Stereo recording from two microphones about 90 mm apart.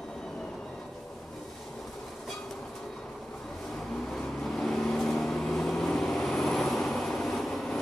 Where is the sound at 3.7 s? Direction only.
5° left (ahead or behind).